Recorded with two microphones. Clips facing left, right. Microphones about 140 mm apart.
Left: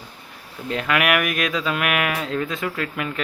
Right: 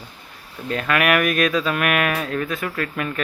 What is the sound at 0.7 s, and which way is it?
Speech, 15° left (ahead or behind).